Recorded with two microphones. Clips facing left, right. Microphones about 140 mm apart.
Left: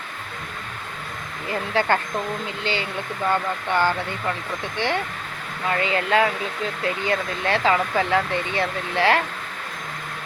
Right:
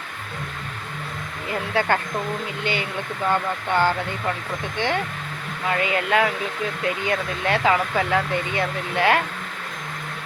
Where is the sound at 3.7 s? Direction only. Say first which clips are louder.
Right 1 dB; 15° right (ahead or behind).